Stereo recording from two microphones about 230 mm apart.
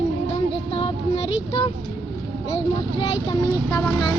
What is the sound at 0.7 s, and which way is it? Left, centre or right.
Child singing, left.